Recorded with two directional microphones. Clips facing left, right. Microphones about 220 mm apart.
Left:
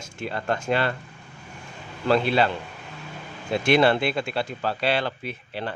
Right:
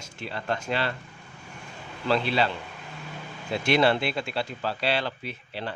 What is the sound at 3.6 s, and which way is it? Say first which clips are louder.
Speech: left 3 dB; 50° left (ahead or behind).